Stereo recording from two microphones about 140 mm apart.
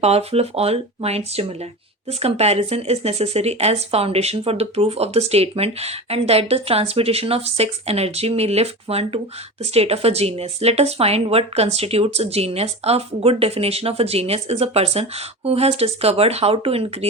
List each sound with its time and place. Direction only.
0.0 s speech: 50° right (ahead or behind)